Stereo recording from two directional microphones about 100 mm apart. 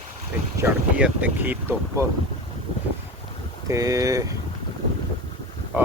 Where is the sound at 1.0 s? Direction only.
15° right (ahead or behind).